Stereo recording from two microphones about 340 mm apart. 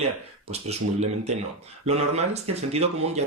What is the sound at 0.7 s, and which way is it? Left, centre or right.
Speech, centre.